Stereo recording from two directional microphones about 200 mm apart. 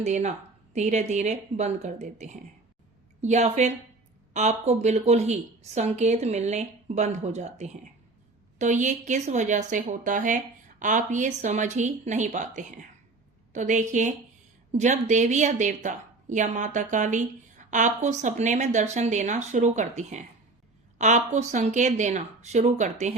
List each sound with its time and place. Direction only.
0.0 s a woman's voice: 35° right (ahead or behind)